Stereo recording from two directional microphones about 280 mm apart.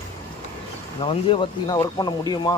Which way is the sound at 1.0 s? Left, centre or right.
Centre.